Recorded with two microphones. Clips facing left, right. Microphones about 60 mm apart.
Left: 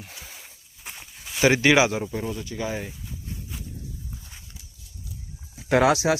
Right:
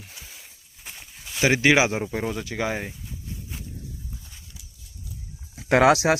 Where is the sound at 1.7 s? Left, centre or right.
Centre.